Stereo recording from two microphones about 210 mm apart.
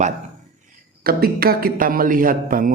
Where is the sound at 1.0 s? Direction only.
45° right (ahead or behind).